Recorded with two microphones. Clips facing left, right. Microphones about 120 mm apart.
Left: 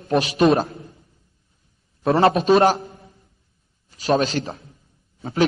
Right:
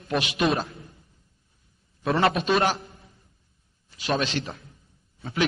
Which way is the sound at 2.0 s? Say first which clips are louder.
Left 6 dB; 30° left (ahead or behind).